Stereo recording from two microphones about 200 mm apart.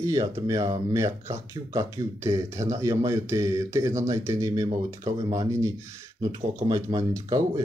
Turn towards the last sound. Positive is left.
turn(degrees=-20)  # may be behind; listen again after turning